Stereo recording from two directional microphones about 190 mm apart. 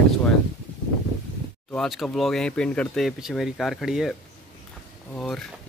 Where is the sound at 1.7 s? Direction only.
Centre (ahead or behind).